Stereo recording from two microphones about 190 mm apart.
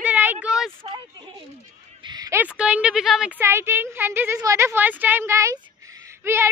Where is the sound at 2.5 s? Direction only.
5° right (ahead or behind).